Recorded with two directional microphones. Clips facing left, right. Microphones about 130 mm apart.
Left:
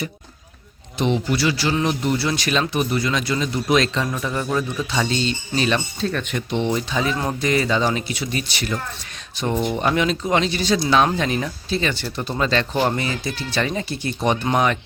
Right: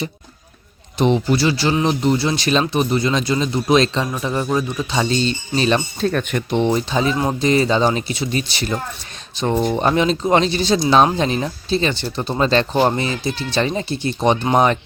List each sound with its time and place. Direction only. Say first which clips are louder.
0.9 s speech: right 4 dB; 35° right (ahead or behind); by 5.0 s 20° right (ahead or behind)
5.0 s speech: right 3 dB; 35° right (ahead or behind)
6.0 s speech: right 4 dB; 50° right (ahead or behind)
6.6 s speech: right 4 dB; 35° right (ahead or behind)